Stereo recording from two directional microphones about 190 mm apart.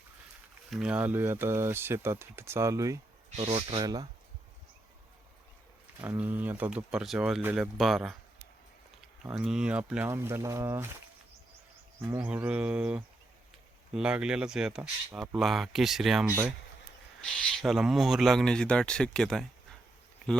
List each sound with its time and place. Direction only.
0.7 s speech: 5° right (ahead or behind)
3.2 s speech: 35° right (ahead or behind)
6.0 s speech: 10° right (ahead or behind)
9.3 s speech: 5° right (ahead or behind)
12.0 s speech: 10° right (ahead or behind)
17.3 s speech: 5° left (ahead or behind)